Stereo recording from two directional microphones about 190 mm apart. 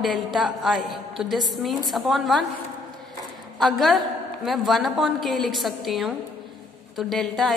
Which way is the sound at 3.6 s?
Centre (ahead or behind).